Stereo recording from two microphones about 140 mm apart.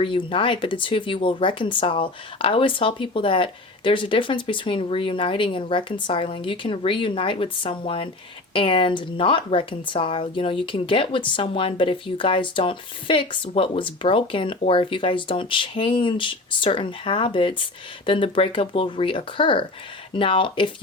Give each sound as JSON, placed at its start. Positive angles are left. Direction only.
{"t": 0.0, "sound": "a woman's voice", "side_deg": 40}